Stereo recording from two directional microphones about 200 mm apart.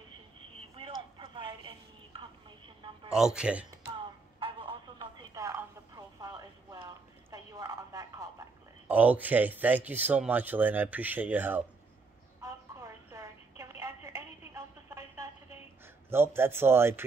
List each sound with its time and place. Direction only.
0.6 s telephone: 25° right (ahead or behind)
3.1 s speech: 5° right (ahead or behind)
4.4 s a sound: 25° right (ahead or behind)
8.8 s speech: 10° right (ahead or behind)
12.4 s telephone: 15° right (ahead or behind)
16.1 s speech: 10° right (ahead or behind)